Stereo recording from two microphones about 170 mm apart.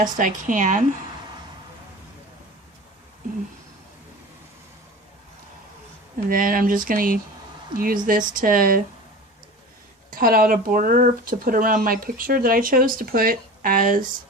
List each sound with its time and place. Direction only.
0.0 s speech: 50° right (ahead or behind)
6.2 s speech: 55° right (ahead or behind)
10.1 s speech: 55° right (ahead or behind)